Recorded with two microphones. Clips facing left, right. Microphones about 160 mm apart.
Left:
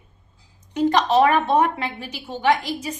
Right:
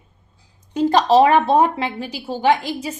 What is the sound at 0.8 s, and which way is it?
A woman's voice, 35° right (ahead or behind).